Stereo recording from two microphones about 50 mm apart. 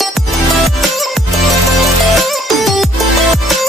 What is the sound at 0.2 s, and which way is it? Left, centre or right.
Music, centre.